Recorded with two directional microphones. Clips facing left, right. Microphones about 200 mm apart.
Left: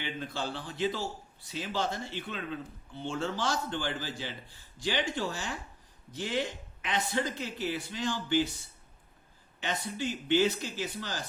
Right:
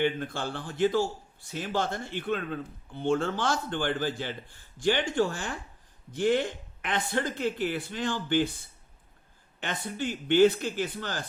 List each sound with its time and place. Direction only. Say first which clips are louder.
0.0 s a man's voice: right 7 dB; 55° right (ahead or behind)
9.6 s speech: right 1 dB; 55° right (ahead or behind)